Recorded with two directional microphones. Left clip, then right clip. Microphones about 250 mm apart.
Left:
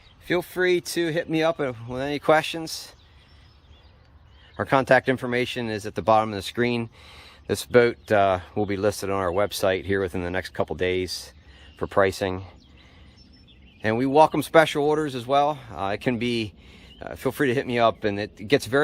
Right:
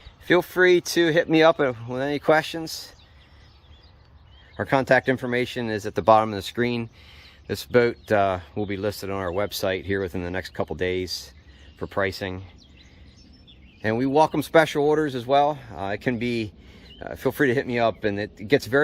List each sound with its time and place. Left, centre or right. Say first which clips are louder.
0.3 s speech: right 5 dB; centre
4.5 s speech: left 1 dB; centre
13.8 s speech: left 2 dB; centre